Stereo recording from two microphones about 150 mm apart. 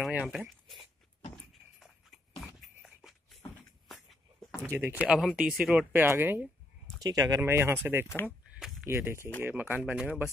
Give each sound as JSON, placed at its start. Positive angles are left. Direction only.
{"t": 0.0, "sound": "speech", "side_deg": -5}
{"t": 1.3, "sound": "a sound", "side_deg": 0}
{"t": 2.4, "sound": "beatboxing", "side_deg": -5}
{"t": 2.8, "sound": "a sound", "side_deg": -5}
{"t": 3.9, "sound": "shuffle", "side_deg": 0}
{"t": 4.6, "sound": "speech", "side_deg": -15}
{"t": 7.0, "sound": "speech", "side_deg": -25}
{"t": 8.1, "sound": "speech", "side_deg": 15}
{"t": 8.8, "sound": "speech", "side_deg": -15}